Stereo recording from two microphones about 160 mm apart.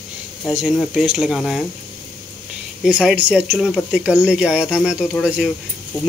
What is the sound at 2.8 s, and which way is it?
Speech, 5° right (ahead or behind).